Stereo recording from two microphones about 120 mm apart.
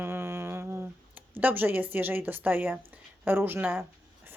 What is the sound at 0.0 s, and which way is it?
Humming, 20° right (ahead or behind).